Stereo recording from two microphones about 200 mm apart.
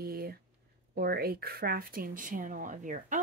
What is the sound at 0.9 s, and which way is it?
Speech, 50° right (ahead or behind).